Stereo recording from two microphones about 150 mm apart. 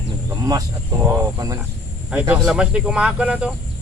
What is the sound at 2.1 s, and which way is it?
Speech, 10° right (ahead or behind).